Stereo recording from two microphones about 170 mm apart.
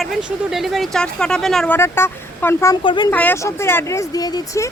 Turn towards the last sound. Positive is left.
turn(degrees=20)  # may be behind; listen again after turning